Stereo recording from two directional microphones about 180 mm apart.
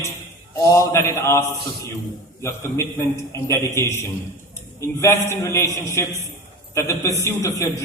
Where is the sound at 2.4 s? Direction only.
15° left (ahead or behind).